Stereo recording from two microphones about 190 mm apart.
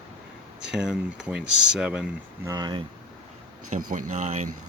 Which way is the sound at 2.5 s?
20° right (ahead or behind).